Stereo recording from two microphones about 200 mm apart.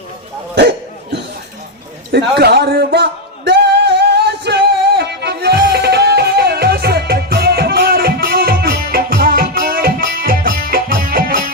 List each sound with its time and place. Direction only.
2.1 s singing: 55° right (ahead or behind)